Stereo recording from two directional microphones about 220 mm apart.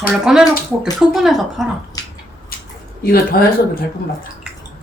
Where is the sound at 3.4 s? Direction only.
45° left (ahead or behind).